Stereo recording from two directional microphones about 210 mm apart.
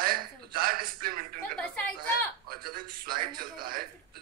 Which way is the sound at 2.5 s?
45° right (ahead or behind).